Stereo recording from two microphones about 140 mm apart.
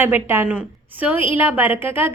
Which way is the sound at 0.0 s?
15° right (ahead or behind).